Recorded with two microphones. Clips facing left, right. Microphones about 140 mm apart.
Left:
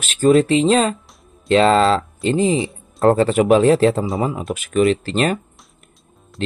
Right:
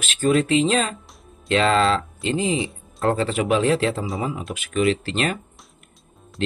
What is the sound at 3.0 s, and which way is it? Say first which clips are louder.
A man's voice: left 7 dB; 45° left (ahead or behind).